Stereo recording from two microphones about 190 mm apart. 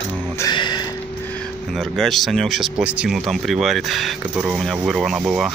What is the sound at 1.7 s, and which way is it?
Speech, centre (ahead or behind).